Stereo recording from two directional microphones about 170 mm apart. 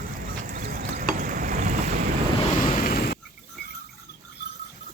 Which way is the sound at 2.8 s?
60° left (ahead or behind).